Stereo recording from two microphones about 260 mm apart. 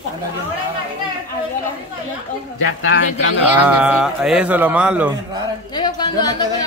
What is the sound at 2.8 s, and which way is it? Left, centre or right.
Speech, left.